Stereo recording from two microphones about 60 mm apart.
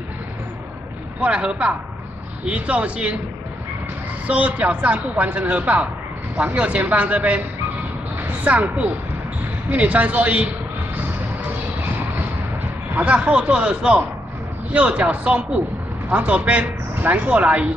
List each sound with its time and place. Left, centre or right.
1.2 s speech: centre
4.3 s speech: right
12.9 s speech: right